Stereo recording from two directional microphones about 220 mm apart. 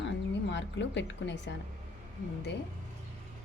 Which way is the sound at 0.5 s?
55° left (ahead or behind).